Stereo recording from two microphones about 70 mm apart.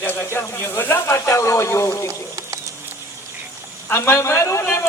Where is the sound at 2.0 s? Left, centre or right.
Right.